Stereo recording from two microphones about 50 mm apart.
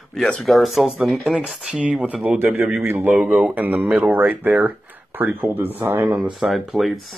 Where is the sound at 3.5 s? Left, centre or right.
Right.